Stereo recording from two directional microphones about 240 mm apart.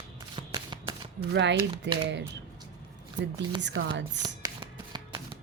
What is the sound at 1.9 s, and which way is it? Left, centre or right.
Speech, right.